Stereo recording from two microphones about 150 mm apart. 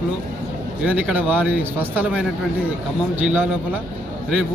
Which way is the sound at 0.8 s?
10° right (ahead or behind).